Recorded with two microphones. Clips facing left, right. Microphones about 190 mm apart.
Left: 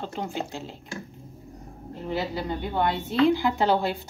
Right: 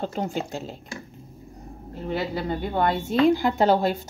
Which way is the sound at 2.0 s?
50° right (ahead or behind).